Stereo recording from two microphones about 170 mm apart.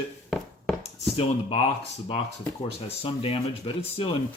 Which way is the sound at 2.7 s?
35° left (ahead or behind).